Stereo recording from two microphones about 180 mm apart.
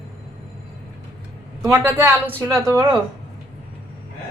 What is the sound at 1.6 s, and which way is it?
Speech, 15° right (ahead or behind).